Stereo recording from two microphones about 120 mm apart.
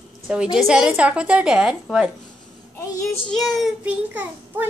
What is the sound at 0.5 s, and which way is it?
A woman's voice, 5° right (ahead or behind).